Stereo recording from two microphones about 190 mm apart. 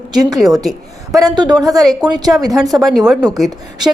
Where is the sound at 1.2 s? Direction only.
20° right (ahead or behind).